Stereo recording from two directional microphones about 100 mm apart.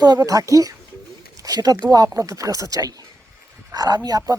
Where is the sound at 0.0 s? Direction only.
40° right (ahead or behind).